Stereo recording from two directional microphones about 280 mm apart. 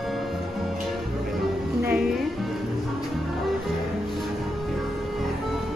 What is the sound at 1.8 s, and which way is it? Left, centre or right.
Music, centre.